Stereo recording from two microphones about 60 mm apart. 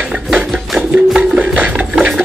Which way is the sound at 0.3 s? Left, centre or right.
Centre.